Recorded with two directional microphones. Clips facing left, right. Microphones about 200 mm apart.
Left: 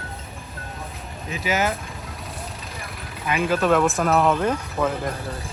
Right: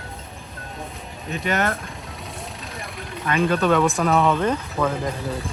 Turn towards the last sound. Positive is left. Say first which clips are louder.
# right 1 dB
turn(degrees=5)  # may be behind; listen again after turning